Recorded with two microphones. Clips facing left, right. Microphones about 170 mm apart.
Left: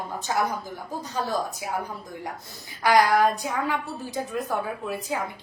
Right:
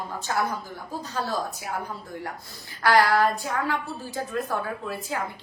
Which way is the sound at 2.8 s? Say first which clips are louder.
Left 1 dB; 15° left (ahead or behind).